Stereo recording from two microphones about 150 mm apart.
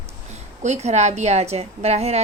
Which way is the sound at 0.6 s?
50° right (ahead or behind).